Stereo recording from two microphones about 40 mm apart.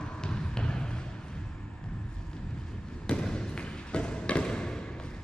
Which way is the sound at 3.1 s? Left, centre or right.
Left.